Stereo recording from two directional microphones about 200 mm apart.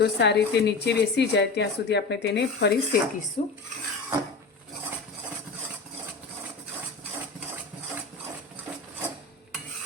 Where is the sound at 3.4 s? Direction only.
35° left (ahead or behind).